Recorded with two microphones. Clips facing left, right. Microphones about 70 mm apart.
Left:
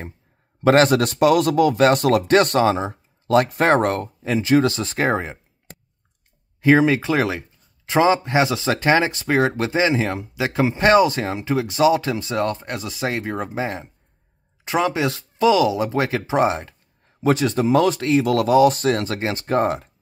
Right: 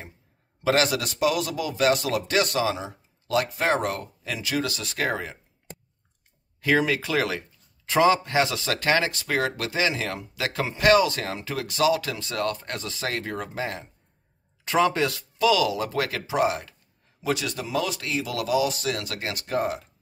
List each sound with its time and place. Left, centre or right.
0.7 s speech: left
6.6 s speech: left
15.0 s speech: left